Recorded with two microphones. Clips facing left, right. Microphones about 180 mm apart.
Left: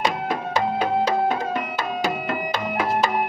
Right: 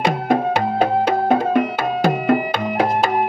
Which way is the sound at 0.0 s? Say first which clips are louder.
Right 7 dB; 55° right (ahead or behind).